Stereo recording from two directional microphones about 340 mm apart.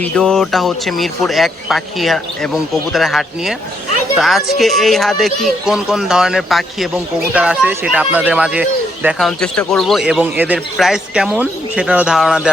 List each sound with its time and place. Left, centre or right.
0.0 s speech: centre